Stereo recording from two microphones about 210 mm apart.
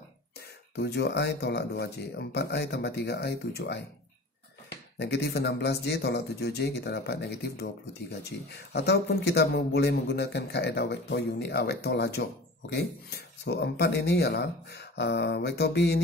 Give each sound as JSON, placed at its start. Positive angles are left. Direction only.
{"t": 0.7, "sound": "speech", "side_deg": 50}
{"t": 4.9, "sound": "speech", "side_deg": 50}